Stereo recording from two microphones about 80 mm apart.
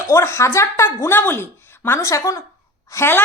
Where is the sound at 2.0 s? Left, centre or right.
Left.